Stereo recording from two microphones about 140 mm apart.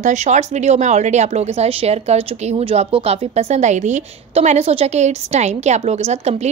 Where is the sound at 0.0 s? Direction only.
55° right (ahead or behind).